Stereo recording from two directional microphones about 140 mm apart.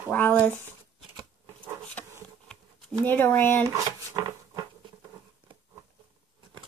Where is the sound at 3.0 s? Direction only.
15° left (ahead or behind).